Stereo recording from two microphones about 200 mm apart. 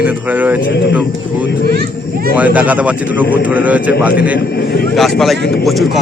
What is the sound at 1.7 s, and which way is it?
Speech, 50° right (ahead or behind).